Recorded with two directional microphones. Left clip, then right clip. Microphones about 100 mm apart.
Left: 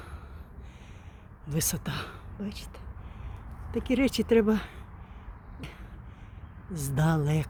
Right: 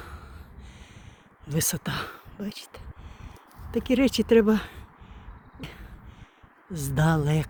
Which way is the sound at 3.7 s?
50° right (ahead or behind).